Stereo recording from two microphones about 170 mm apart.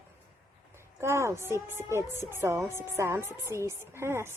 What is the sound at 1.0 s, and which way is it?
A woman's voice, 15° right (ahead or behind).